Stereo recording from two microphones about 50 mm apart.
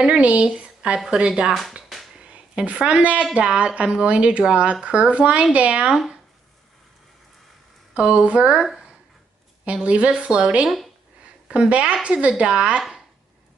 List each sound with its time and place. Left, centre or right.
0.2 s a woman's voice: right
7.9 s a woman's voice: right
9.8 s a woman's voice: right